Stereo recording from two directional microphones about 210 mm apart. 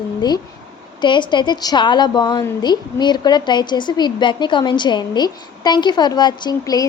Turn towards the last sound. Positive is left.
turn(degrees=20)  # may be behind; listen again after turning